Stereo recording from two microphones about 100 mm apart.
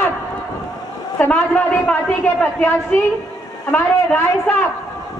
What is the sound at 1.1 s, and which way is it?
A woman's voice, 15° left (ahead or behind).